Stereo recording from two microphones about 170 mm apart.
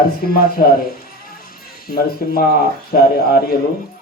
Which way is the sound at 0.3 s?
60° left (ahead or behind).